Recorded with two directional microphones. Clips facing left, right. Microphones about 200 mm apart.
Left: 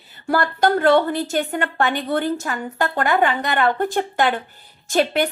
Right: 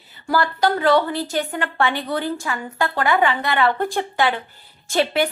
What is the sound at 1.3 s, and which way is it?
A woman's voice, 45° left (ahead or behind).